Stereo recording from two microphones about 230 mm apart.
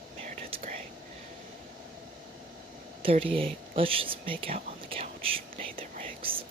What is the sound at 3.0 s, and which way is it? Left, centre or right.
Speech, right.